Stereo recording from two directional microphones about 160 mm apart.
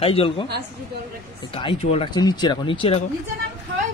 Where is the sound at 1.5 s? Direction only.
35° left (ahead or behind).